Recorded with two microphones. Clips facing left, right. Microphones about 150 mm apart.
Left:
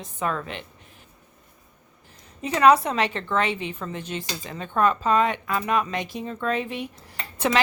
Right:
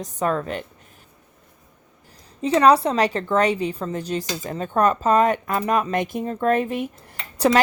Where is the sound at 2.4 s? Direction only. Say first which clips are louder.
Right 2 dB; 30° right (ahead or behind).